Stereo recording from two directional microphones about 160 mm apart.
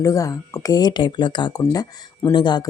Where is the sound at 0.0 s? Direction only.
20° left (ahead or behind).